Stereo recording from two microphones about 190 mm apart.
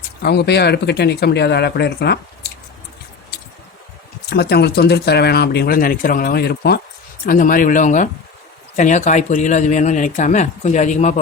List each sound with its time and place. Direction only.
0.2 s speech: 60° left (ahead or behind)
4.3 s speech: 60° left (ahead or behind)
7.3 s speech: 45° left (ahead or behind)